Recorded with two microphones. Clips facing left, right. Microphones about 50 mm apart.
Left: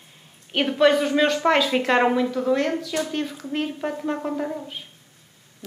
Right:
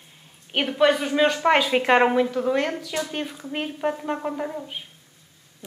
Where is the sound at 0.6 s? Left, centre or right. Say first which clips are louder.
Left 2 dB; centre.